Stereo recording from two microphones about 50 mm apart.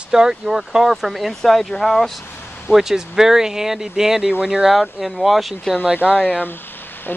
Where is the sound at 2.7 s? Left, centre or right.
Centre.